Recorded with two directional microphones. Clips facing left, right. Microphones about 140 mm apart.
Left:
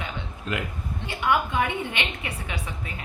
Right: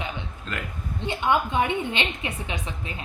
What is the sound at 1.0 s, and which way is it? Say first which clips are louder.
A woman's voice: right 1 dB; 25° right (ahead or behind).